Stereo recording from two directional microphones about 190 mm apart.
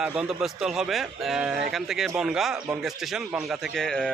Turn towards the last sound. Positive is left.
turn(degrees=5)  # may be behind; listen again after turning